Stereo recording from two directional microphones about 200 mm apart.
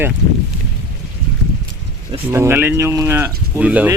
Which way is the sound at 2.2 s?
10° right (ahead or behind).